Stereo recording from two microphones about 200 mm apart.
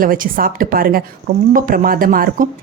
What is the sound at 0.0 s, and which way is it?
A woman's voice, 45° right (ahead or behind).